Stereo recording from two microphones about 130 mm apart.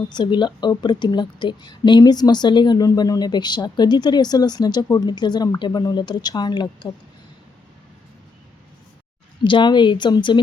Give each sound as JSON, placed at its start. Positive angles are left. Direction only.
{"t": 0.1, "sound": "a woman's voice", "side_deg": 35}
{"t": 9.4, "sound": "a woman's voice", "side_deg": 40}